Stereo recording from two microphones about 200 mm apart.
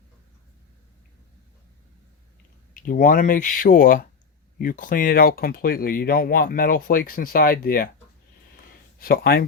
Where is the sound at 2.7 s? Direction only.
45° left (ahead or behind).